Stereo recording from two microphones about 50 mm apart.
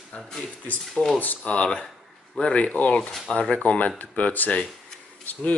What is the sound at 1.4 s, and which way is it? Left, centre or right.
Speech, left.